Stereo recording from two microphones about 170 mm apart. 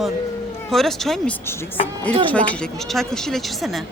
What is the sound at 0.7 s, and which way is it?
Speech, centre (ahead or behind).